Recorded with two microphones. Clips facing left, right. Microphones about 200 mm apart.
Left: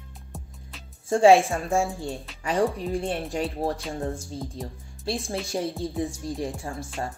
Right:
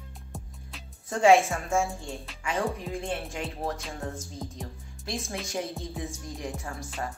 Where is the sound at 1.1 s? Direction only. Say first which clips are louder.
Left 4 dB; 30° left (ahead or behind).